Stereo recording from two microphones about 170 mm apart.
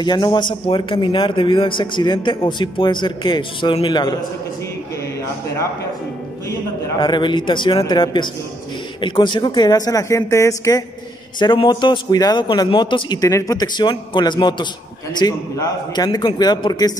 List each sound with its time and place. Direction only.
0.0 s a man's voice: 25° left (ahead or behind)
7.0 s a man's voice: 25° left (ahead or behind)
11.3 s a man's voice: 30° left (ahead or behind)